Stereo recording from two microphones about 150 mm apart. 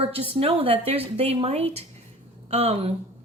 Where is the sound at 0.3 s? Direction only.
40° right (ahead or behind).